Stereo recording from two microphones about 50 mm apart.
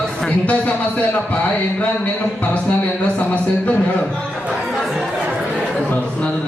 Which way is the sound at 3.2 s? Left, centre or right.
Left.